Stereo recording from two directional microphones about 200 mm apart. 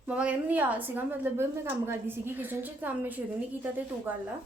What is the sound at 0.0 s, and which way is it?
A woman's voice, 5° right (ahead or behind).